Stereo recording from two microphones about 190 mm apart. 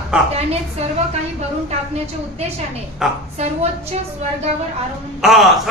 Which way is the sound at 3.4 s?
35° right (ahead or behind).